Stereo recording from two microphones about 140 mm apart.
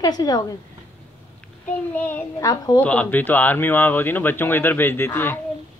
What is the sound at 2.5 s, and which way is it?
Speech, 25° left (ahead or behind).